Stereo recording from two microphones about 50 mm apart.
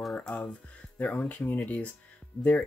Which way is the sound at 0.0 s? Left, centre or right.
Centre.